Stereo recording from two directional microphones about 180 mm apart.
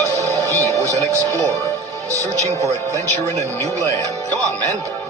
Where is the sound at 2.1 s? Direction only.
20° right (ahead or behind).